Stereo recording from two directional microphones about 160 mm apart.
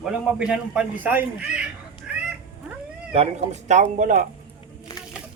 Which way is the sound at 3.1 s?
40° right (ahead or behind).